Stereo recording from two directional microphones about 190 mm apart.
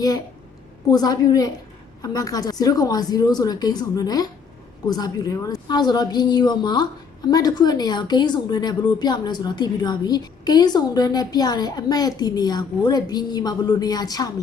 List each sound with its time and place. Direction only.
0.9 s a woman's voice: 20° left (ahead or behind)